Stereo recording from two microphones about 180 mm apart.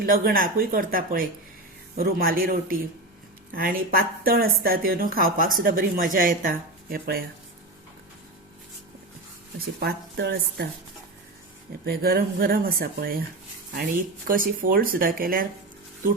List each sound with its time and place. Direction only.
0.0 s speech: 50° right (ahead or behind)
9.6 s speech: 60° right (ahead or behind)
11.9 s speech: 60° right (ahead or behind)
14.3 s speech: 50° right (ahead or behind)